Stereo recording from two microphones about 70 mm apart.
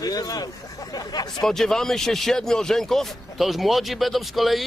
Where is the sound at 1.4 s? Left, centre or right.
Centre.